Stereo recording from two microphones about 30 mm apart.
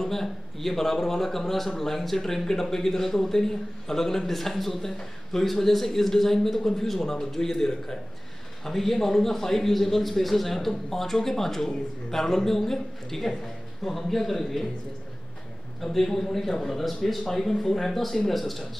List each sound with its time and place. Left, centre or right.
0.0 s a man's voice: centre
15.8 s a man's voice: centre